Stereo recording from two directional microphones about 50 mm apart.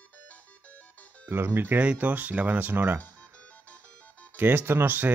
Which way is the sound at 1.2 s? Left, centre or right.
Right.